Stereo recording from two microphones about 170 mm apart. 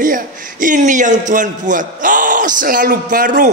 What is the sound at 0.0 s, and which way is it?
A man's voice, 50° right (ahead or behind).